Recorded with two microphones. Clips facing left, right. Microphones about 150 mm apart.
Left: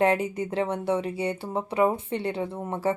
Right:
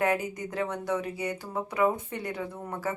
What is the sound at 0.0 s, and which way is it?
Speech, 30° left (ahead or behind).